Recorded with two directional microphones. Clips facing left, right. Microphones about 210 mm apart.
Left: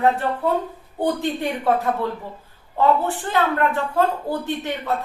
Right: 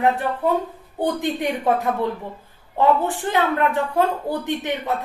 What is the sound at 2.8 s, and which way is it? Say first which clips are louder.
Speech: even; 15° right (ahead or behind).